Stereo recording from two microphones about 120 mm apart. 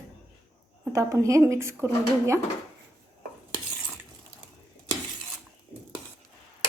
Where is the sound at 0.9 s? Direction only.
25° right (ahead or behind).